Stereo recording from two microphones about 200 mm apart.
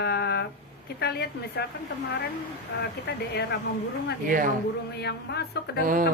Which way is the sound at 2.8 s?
55° left (ahead or behind).